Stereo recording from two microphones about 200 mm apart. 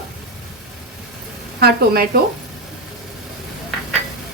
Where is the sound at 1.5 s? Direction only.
50° right (ahead or behind).